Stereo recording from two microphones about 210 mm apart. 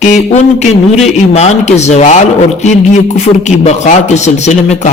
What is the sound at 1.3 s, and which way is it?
A man's voice, 30° left (ahead or behind).